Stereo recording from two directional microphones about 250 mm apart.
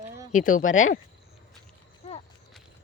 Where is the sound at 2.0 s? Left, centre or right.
Left.